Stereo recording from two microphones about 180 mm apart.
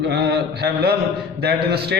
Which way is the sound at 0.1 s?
65° right (ahead or behind).